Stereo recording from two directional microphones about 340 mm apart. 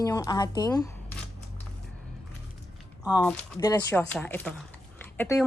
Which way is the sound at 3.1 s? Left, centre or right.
Centre.